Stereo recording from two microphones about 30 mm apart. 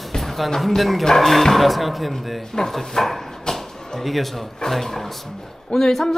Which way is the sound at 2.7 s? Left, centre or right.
Centre.